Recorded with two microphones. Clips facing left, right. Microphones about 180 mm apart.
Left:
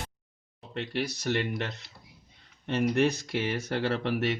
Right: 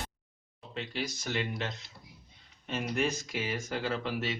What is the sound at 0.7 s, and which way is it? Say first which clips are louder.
Speech: left 5 dB; 65° left (ahead or behind).